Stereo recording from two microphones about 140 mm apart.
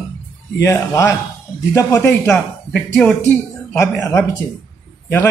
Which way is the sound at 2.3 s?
5° left (ahead or behind).